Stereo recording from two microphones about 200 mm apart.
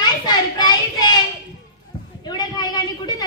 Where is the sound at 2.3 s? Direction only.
20° left (ahead or behind).